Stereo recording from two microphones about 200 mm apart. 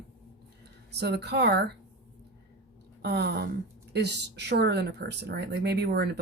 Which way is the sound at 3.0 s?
55° right (ahead or behind).